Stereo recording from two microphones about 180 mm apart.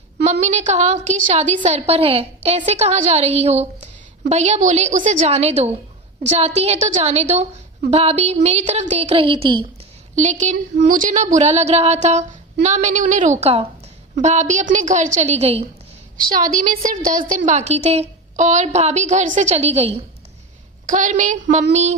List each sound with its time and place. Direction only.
0.3 s a woman's voice: 40° right (ahead or behind)
10.2 s a woman's voice: 40° right (ahead or behind)
16.4 s a woman's voice: 50° right (ahead or behind)
20.8 s a woman's voice: 45° right (ahead or behind)